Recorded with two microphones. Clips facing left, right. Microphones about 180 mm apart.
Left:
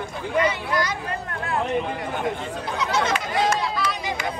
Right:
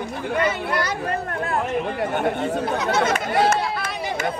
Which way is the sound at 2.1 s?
65° right (ahead or behind).